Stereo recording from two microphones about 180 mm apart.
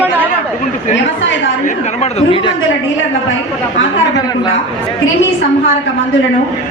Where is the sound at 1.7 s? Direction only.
35° left (ahead or behind).